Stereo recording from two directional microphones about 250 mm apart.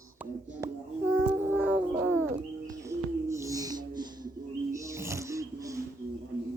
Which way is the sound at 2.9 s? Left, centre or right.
Centre.